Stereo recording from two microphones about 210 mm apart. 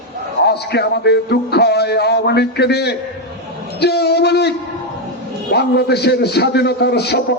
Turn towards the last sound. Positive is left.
turn(degrees=50)  # may be behind; listen again after turning